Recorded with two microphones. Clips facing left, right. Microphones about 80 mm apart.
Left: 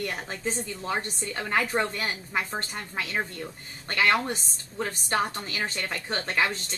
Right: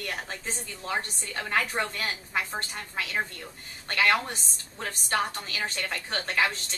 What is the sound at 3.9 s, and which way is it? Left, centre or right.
Speech, left.